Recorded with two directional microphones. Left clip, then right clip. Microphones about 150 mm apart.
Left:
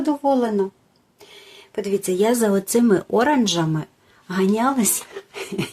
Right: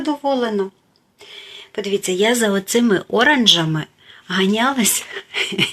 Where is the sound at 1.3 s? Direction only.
20° left (ahead or behind).